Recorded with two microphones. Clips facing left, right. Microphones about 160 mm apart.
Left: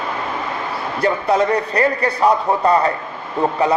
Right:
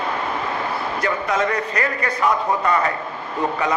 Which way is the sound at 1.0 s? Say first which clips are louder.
Left 6 dB; 35° left (ahead or behind).